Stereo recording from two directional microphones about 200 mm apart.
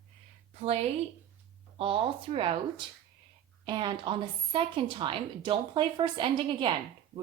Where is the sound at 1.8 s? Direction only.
25° right (ahead or behind).